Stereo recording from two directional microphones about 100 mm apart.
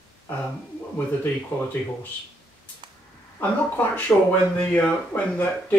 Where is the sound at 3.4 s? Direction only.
20° left (ahead or behind).